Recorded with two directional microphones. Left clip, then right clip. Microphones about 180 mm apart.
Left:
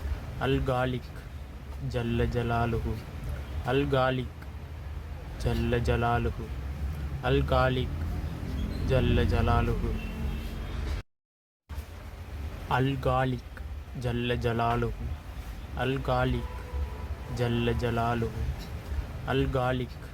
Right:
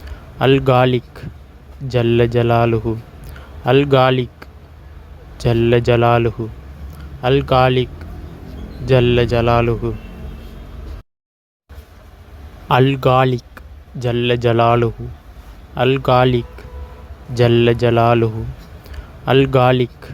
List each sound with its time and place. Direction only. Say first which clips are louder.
0.3 s speech: right 16 dB; 45° right (ahead or behind)
5.4 s speech: right 16 dB; 45° right (ahead or behind)
8.9 s speech: right 15 dB; 45° right (ahead or behind)
12.6 s speech: right 14 dB; 45° right (ahead or behind)